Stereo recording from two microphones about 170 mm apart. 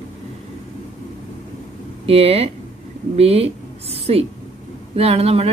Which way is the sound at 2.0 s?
35° right (ahead or behind).